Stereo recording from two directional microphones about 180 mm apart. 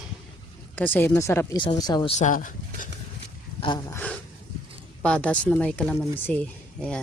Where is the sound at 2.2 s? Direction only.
45° left (ahead or behind).